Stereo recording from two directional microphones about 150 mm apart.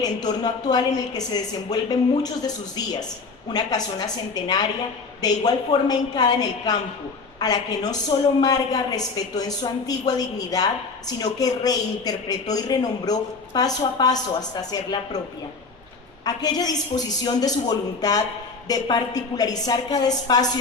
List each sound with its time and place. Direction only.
0.0 s a man's voice: 25° left (ahead or behind)
3.5 s a man's voice: 25° left (ahead or behind)
16.2 s a man's voice: 25° left (ahead or behind)